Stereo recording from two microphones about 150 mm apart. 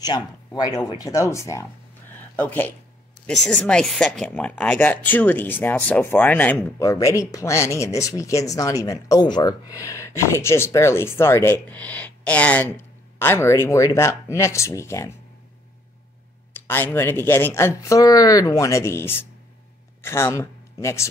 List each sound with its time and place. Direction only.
0.0 s a woman's voice: 25° left (ahead or behind)
16.5 s a woman's voice: 15° left (ahead or behind)